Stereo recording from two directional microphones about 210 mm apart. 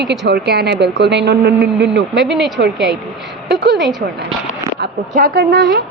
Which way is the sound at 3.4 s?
50° right (ahead or behind).